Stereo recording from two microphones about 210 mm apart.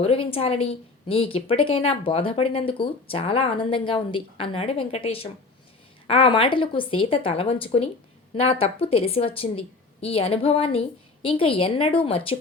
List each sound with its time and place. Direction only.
0.0 s a woman's voice: 25° left (ahead or behind)